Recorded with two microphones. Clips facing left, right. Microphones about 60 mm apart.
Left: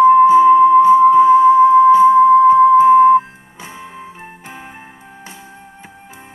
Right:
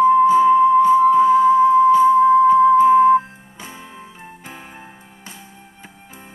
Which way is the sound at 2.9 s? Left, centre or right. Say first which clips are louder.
Left 4 dB; centre.